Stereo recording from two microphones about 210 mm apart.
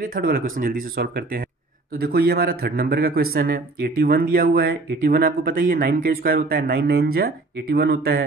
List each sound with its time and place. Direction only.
0.0 s a man's voice: 45° right (ahead or behind)